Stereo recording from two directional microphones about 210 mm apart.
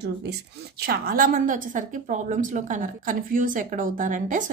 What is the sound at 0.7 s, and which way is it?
A woman's voice, 45° right (ahead or behind).